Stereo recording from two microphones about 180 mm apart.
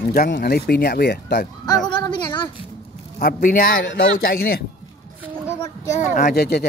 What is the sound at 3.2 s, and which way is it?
Speech, 55° left (ahead or behind).